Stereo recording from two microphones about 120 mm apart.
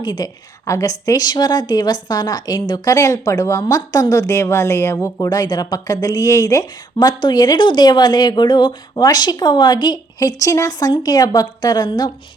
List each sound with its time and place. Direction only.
0.0 s a woman's voice: 35° left (ahead or behind)